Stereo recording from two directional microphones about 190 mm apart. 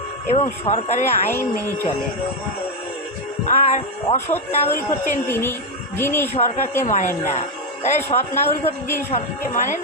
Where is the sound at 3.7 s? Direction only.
35° left (ahead or behind).